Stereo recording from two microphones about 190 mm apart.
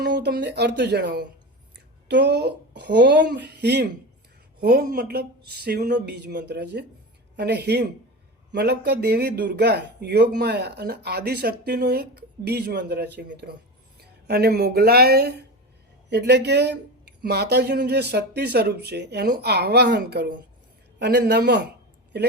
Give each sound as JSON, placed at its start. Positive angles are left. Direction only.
{"t": 0.0, "sound": "a man's voice", "side_deg": -65}